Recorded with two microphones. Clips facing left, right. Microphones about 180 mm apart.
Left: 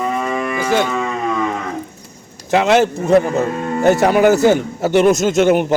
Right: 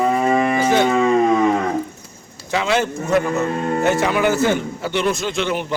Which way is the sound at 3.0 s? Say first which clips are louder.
Left 5 dB; 30° left (ahead or behind).